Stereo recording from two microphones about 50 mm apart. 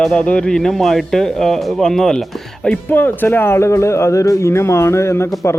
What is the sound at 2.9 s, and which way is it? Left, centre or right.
Speech, left.